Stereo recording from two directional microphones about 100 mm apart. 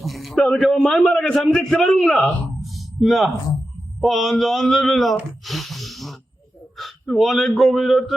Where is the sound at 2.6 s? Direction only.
Centre (ahead or behind).